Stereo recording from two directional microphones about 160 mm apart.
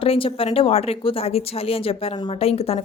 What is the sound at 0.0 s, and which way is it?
A woman's voice, 35° left (ahead or behind).